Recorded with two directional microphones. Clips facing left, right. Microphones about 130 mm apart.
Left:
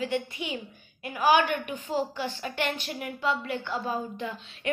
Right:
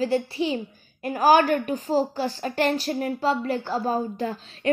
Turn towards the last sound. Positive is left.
turn(degrees=-40)  # may be behind; listen again after turning